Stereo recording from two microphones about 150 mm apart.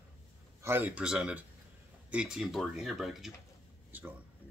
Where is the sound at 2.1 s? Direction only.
5° right (ahead or behind).